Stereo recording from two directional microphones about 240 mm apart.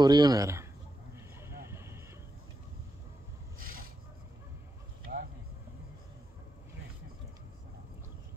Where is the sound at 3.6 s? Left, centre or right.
Right.